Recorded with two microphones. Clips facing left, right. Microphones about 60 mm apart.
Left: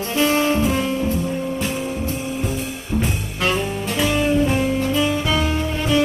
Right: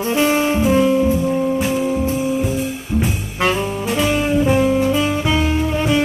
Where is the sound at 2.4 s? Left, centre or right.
Centre.